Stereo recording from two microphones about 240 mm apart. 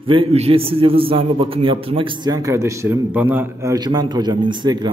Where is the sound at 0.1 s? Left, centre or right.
Right.